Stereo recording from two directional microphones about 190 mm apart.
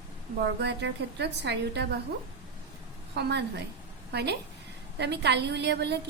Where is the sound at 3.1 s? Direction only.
60° right (ahead or behind).